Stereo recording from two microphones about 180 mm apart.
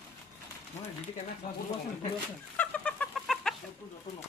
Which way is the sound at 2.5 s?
5° left (ahead or behind).